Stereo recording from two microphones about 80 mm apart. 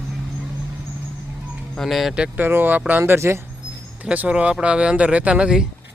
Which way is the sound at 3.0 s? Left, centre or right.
Right.